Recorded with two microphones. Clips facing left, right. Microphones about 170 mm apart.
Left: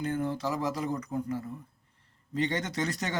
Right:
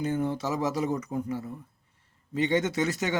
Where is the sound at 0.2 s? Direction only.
20° right (ahead or behind).